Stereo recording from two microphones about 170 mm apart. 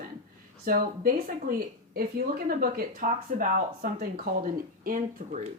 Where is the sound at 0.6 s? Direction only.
55° right (ahead or behind).